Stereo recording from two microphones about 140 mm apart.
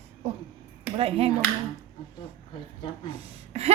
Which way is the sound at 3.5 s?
50° right (ahead or behind).